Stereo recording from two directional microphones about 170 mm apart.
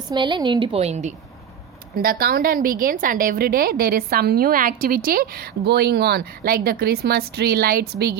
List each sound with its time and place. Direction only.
0.1 s a woman's voice: 30° right (ahead or behind)
2.0 s a woman's voice: 60° right (ahead or behind)